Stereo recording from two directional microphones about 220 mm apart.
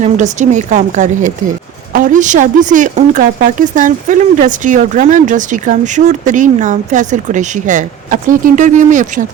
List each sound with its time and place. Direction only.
0.0 s speech: 35° right (ahead or behind)